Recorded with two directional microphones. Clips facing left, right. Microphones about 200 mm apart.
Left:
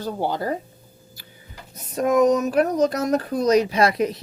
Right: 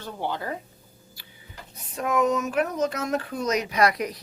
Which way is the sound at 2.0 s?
40° left (ahead or behind).